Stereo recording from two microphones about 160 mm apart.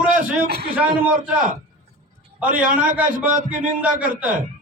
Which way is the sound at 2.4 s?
55° right (ahead or behind).